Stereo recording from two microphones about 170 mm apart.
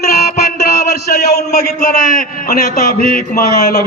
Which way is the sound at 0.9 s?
70° left (ahead or behind).